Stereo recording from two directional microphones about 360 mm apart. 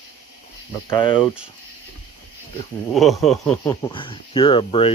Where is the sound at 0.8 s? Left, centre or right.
Centre.